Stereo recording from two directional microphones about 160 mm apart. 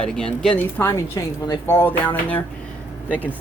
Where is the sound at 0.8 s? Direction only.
15° left (ahead or behind).